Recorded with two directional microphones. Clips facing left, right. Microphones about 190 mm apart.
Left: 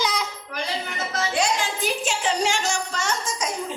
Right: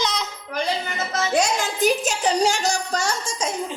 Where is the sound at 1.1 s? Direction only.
45° right (ahead or behind).